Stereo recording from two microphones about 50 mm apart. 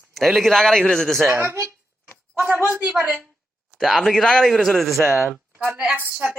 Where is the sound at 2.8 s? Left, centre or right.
Right.